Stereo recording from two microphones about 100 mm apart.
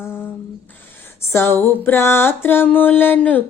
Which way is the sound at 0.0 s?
25° left (ahead or behind).